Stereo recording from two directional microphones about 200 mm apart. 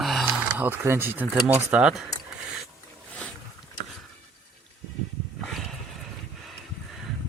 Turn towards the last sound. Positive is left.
turn(degrees=0)  # may be behind; listen again after turning